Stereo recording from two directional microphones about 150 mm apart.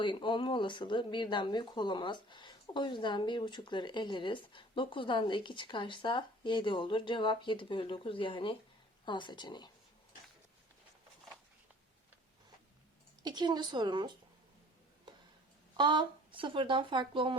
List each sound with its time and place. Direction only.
0.0 s speech: 30° left (ahead or behind)
13.2 s a woman's voice: 30° right (ahead or behind)
15.8 s speech: 30° right (ahead or behind)